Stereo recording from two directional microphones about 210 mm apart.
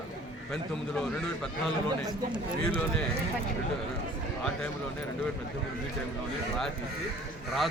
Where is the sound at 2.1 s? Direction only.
20° right (ahead or behind).